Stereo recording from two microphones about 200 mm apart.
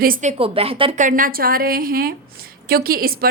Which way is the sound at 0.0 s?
40° right (ahead or behind).